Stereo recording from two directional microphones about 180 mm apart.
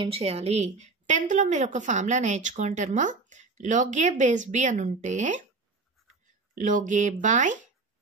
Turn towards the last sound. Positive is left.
turn(degrees=-45)  # may be behind; listen again after turning